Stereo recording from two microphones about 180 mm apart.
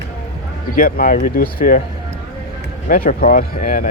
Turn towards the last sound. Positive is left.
turn(degrees=50)  # may be behind; listen again after turning